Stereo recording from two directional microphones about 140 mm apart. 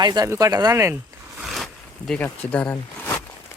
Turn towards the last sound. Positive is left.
turn(degrees=15)  # may be behind; listen again after turning